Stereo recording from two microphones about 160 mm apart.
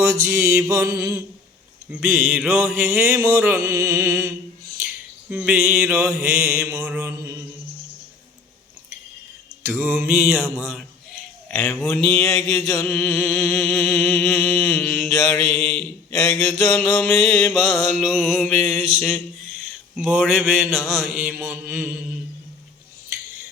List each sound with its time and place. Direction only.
0.0 s mantra: 10° right (ahead or behind)
1.9 s mantra: 5° right (ahead or behind)
5.5 s mantra: 5° right (ahead or behind)
9.6 s mantra: 5° right (ahead or behind)
11.4 s speech: 10° left (ahead or behind)
12.0 s mantra: 20° left (ahead or behind)
12.9 s a sound: 10° left (ahead or behind)
16.6 s mantra: centre (ahead or behind)
16.9 s a sound: 10° left (ahead or behind)
17.5 s mantra: 5° right (ahead or behind)
18.4 s a sound: 10° left (ahead or behind)
20.0 s mantra: 5° right (ahead or behind)